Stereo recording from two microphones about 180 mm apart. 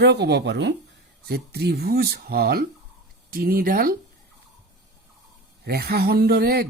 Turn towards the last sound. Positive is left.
turn(degrees=-60)  # may be behind; listen again after turning